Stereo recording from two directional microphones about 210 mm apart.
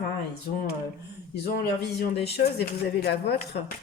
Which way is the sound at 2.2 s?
50° left (ahead or behind).